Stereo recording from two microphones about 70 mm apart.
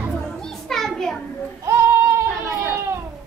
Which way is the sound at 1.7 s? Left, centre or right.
Right.